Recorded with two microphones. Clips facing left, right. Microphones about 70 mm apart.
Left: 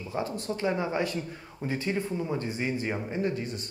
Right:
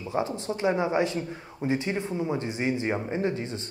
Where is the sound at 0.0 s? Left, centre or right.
Right.